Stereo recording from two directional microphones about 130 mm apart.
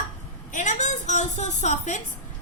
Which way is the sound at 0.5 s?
70° left (ahead or behind).